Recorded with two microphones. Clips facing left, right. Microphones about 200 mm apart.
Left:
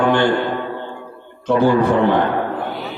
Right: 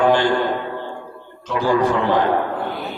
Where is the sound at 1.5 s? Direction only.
55° left (ahead or behind).